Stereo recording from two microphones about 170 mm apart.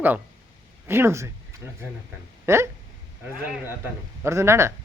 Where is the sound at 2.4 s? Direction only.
15° right (ahead or behind).